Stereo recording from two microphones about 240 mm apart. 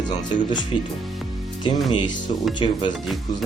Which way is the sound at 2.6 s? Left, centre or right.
Left.